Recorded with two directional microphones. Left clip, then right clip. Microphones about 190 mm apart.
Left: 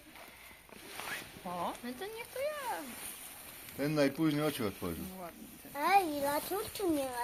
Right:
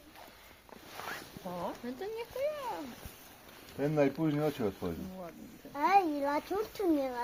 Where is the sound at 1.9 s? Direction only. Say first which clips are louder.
Right 3 dB; 50° right (ahead or behind).